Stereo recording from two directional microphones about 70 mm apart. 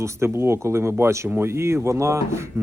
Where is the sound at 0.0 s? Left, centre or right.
Right.